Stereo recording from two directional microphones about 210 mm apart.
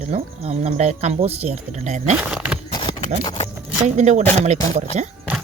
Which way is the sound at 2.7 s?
20° left (ahead or behind).